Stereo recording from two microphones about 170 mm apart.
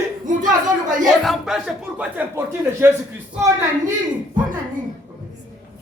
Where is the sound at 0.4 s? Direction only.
50° right (ahead or behind).